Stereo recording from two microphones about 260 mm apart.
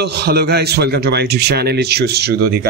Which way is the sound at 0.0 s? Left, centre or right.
Right.